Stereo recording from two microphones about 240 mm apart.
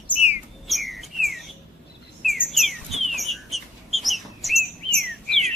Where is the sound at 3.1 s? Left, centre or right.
Centre.